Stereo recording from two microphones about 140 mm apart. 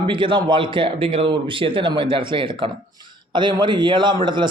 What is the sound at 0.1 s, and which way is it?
Speech, 35° right (ahead or behind).